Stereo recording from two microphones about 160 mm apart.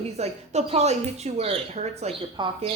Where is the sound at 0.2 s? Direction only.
45° right (ahead or behind).